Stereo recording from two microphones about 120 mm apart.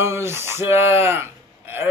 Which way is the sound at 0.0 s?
20° right (ahead or behind).